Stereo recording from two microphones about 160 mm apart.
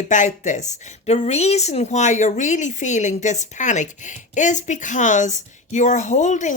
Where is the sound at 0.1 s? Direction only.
50° left (ahead or behind).